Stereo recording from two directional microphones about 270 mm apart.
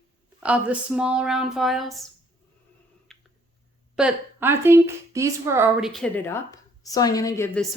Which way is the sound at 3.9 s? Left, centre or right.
Centre.